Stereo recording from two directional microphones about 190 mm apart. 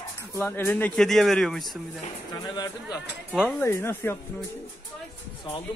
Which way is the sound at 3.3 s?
Centre (ahead or behind).